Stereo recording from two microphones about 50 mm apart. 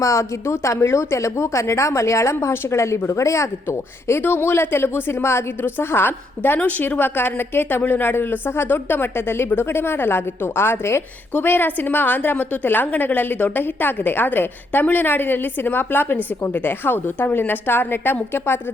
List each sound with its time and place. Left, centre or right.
0.0 s a woman's voice: left
3.1 s speech: left
4.2 s a woman's voice: left
7.8 s a woman's voice: left
11.3 s a woman's voice: left